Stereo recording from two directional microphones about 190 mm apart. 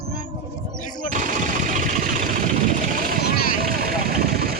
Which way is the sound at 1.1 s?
45° right (ahead or behind).